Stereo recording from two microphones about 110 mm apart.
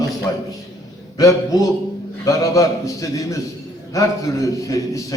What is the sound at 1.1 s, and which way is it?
A man's voice, 35° left (ahead or behind).